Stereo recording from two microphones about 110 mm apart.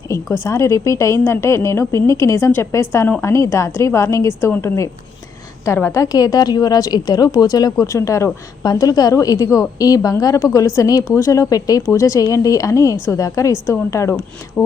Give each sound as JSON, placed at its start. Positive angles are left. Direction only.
{"t": 0.4, "sound": "a woman's voice", "side_deg": 25}